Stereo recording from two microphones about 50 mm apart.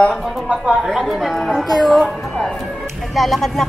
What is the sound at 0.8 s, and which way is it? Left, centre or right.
Speech, centre.